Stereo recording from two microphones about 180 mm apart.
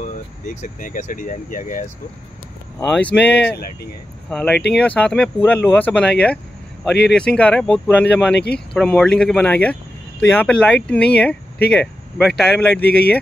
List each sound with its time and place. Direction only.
0.6 s speech: 45° left (ahead or behind)
2.9 s speech: 10° left (ahead or behind)
12.8 s speech: 60° left (ahead or behind)